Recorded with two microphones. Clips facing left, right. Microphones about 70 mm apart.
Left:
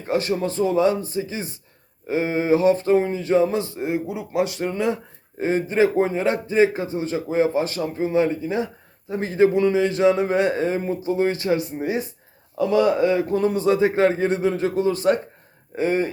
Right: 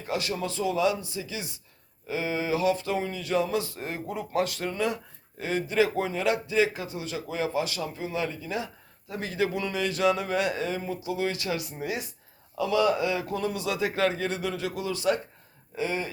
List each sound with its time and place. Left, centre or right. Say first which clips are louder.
0.0 s speech: left 8 dB; left
3.8 s speech: left 8 dB; centre; by 16.0 s left